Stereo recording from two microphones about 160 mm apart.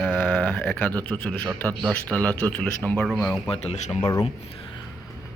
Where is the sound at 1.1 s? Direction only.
10° left (ahead or behind).